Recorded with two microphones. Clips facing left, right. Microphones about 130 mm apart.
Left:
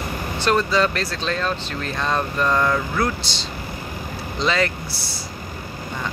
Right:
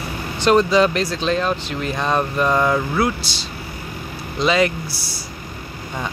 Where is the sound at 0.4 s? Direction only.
20° right (ahead or behind).